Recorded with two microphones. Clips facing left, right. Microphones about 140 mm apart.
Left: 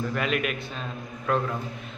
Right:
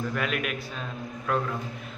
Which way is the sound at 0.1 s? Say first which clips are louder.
Left 2 dB; centre (ahead or behind).